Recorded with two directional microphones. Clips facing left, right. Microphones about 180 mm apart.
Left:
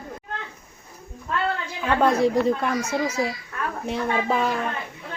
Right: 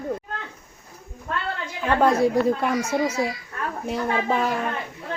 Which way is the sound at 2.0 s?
5° right (ahead or behind).